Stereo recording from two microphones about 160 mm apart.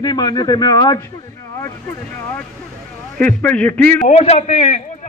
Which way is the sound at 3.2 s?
10° left (ahead or behind).